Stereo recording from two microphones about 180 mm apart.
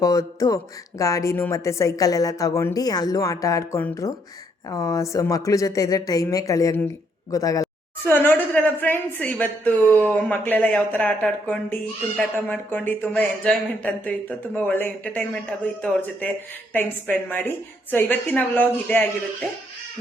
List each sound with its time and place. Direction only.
0.0 s a woman's voice: 20° left (ahead or behind)